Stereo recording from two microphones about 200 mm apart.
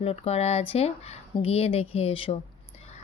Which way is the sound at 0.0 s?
30° left (ahead or behind).